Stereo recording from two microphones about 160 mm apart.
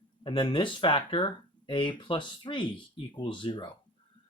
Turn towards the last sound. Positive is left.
turn(degrees=30)  # may be behind; listen again after turning